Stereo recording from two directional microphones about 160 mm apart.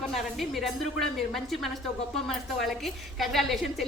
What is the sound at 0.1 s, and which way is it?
Speech, centre (ahead or behind).